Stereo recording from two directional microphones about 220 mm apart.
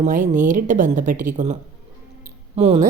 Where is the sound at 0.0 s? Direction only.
35° right (ahead or behind).